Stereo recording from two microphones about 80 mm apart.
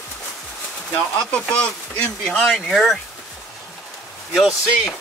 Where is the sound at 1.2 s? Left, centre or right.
Centre.